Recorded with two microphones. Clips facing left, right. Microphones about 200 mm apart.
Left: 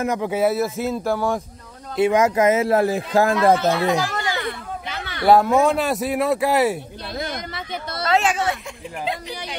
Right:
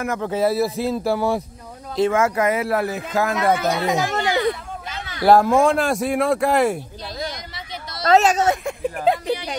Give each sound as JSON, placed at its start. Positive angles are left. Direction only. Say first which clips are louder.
{"t": 0.0, "sound": "speech", "louder": "left 2 dB", "side_deg": 20}
{"t": 0.3, "sound": "speech", "louder": "right 1 dB", "side_deg": 5}
{"t": 0.7, "sound": "speech", "louder": "right 1 dB", "side_deg": -35}
{"t": 0.9, "sound": "speech", "louder": "right 1 dB", "side_deg": -10}
{"t": 2.0, "sound": "speech", "louder": "left 2 dB", "side_deg": 15}
{"t": 3.7, "sound": "speech", "louder": "even", "side_deg": -20}
{"t": 4.8, "sound": "a sound", "louder": "left 2 dB", "side_deg": 65}
{"t": 5.2, "sound": "speech", "louder": "right 1 dB", "side_deg": 0}
{"t": 7.2, "sound": "a sound", "louder": "left 3 dB", "side_deg": 55}
{"t": 8.1, "sound": "speech", "louder": "right 5 dB", "side_deg": -40}
{"t": 8.6, "sound": "speech", "louder": "right 8 dB", "side_deg": -50}